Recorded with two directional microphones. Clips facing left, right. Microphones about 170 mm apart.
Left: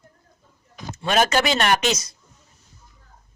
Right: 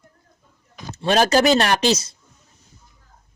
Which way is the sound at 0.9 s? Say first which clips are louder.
Right 3 dB; 30° right (ahead or behind).